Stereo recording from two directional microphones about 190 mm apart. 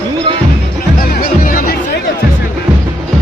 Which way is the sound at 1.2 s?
50° left (ahead or behind).